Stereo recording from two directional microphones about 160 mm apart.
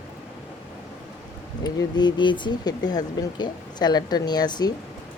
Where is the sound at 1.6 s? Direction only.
25° left (ahead or behind).